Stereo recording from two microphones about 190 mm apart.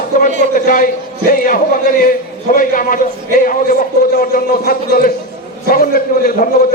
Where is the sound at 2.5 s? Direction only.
50° left (ahead or behind).